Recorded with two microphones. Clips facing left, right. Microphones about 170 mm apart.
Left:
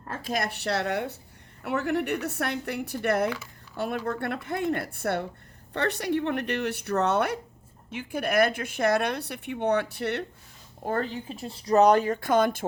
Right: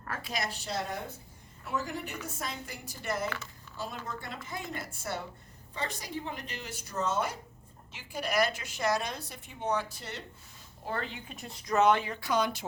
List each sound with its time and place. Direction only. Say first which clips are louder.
0.2 s a woman's voice: left 9 dB; 50° left (ahead or behind)
3.2 s speech: left 7 dB; 10° left (ahead or behind)
3.8 s a woman's voice: left 10 dB; 65° left (ahead or behind)
10.8 s speech: left 8 dB; 40° left (ahead or behind)